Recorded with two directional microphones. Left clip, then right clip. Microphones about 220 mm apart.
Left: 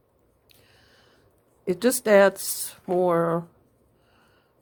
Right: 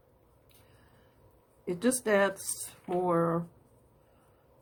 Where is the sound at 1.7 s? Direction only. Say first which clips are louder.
Left 8 dB; 45° left (ahead or behind).